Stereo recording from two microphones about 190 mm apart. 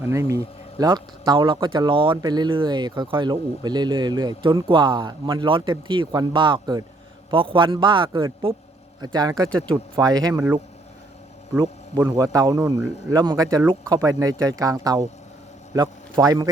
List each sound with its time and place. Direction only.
0.0 s speech: 15° right (ahead or behind)
9.5 s speech: 5° left (ahead or behind)
9.9 s speech: 20° right (ahead or behind)
11.6 s a man's voice: 20° right (ahead or behind)